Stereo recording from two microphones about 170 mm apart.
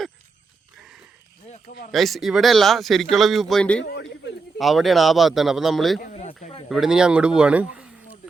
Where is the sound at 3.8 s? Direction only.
90° left.